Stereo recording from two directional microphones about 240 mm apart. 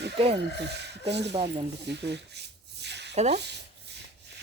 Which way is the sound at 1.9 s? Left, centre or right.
Right.